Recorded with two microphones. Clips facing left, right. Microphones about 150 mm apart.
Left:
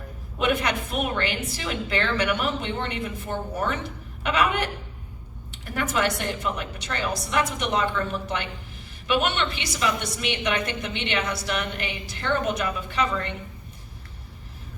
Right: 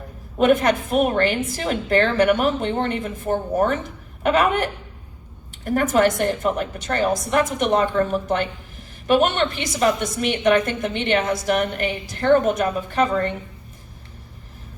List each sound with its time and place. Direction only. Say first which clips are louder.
0.3 s a woman's voice: right 8 dB; 45° right (ahead or behind)